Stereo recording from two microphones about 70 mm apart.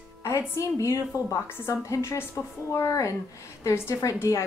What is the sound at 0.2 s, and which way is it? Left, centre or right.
A woman's voice, left.